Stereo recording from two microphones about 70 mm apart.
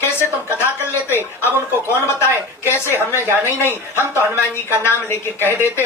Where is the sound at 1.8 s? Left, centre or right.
Left.